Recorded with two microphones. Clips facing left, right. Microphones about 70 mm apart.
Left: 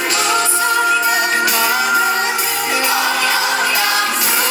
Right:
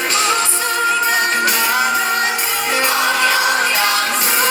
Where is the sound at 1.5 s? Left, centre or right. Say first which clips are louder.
Left 1 dB; right.